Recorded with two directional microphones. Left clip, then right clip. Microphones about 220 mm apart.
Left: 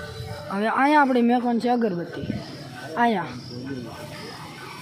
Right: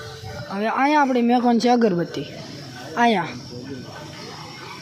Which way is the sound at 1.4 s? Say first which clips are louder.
Right 5 dB; 15° right (ahead or behind).